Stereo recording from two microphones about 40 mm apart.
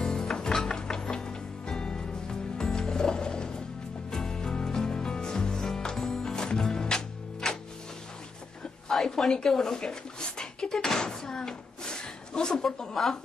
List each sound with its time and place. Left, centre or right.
0.0 s music: centre
8.9 s a sound: centre
10.9 s speech: centre